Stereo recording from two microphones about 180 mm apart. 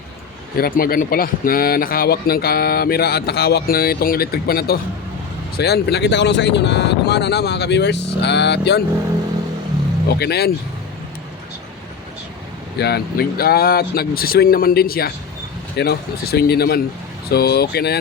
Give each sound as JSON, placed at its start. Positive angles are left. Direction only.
{"t": 0.5, "sound": "speech", "side_deg": 55}
{"t": 10.1, "sound": "speech", "side_deg": 65}
{"t": 12.8, "sound": "speech", "side_deg": 60}